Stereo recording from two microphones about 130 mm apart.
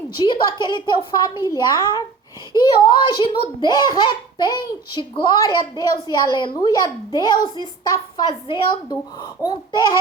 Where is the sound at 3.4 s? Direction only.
35° left (ahead or behind).